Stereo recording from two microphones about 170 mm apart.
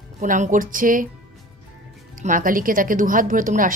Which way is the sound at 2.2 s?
55° right (ahead or behind).